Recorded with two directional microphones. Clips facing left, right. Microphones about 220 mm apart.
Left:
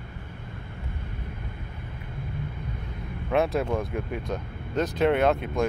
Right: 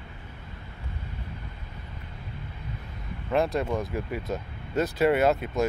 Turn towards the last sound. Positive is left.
turn(degrees=-5)  # may be behind; listen again after turning